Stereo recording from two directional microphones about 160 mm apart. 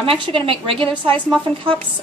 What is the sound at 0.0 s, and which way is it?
A woman's voice, 35° right (ahead or behind).